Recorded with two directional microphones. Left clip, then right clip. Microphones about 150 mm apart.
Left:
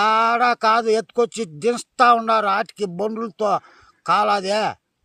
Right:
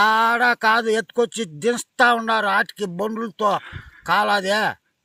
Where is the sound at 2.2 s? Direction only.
35° left (ahead or behind).